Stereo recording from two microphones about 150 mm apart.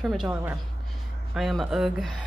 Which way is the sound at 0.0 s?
10° right (ahead or behind).